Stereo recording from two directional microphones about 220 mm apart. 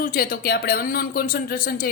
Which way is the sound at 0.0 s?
40° left (ahead or behind).